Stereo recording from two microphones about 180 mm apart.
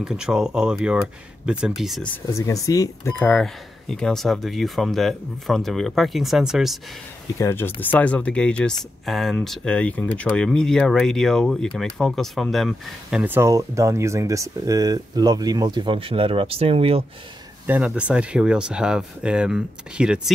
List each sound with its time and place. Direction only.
0.0 s speech: 5° right (ahead or behind)
2.2 s speech: 15° left (ahead or behind)
3.2 s speech: 5° left (ahead or behind)
7.3 s speech: 15° left (ahead or behind); by 17.0 s 30° right (ahead or behind)
17.6 s speech: 10° right (ahead or behind)